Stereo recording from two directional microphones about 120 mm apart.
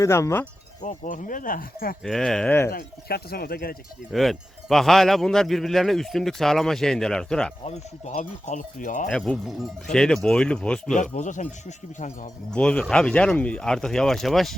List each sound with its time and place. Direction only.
0.0 s speech: 25° left (ahead or behind)
0.8 s speech: 90° left
2.0 s speech: 5° left (ahead or behind)
2.5 s speech: 20° left (ahead or behind)
4.1 s speech: centre (ahead or behind)
7.6 s speech: 65° left (ahead or behind); by 9.0 s 90° left
9.0 s speech: 10° left (ahead or behind)
10.9 s speech: 90° left
12.5 s speech: 10° left (ahead or behind)